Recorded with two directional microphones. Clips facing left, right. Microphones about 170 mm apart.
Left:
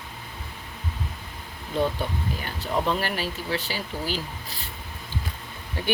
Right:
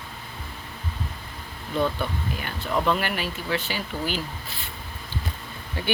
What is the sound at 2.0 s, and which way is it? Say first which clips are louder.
Speech: even; 40° left (ahead or behind).